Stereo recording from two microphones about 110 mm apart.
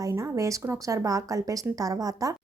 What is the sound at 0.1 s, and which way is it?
Speech, 30° right (ahead or behind).